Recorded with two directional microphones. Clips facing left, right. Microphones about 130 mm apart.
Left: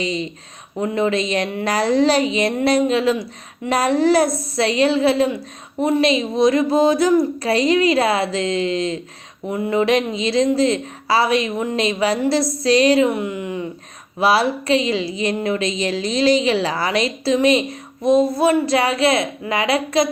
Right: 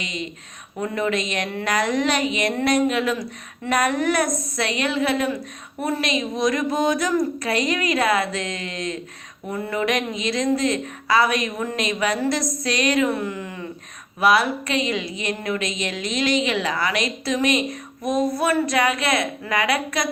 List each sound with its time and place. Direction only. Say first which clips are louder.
0.0 s a woman's voice: left 8 dB; 30° left (ahead or behind)
14.2 s a woman's voice: left 2 dB; 30° left (ahead or behind)